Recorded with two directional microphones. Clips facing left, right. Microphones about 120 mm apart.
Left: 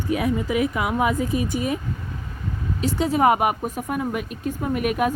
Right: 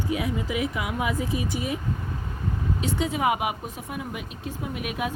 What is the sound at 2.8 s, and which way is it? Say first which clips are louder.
Speech: left 7 dB; 40° left (ahead or behind).